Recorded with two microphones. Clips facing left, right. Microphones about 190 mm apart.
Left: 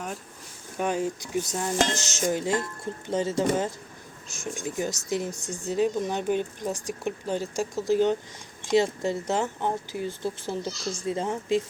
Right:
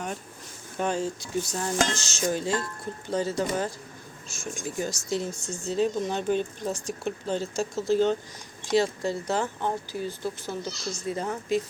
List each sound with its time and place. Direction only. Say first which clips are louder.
0.8 s speech: left 1 dB; 15° left (ahead or behind)